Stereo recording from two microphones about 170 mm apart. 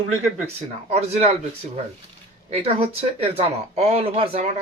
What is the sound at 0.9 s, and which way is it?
Speech, 40° right (ahead or behind).